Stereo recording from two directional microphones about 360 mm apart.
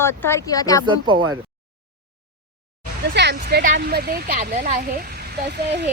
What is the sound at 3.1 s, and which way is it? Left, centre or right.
Speech, right.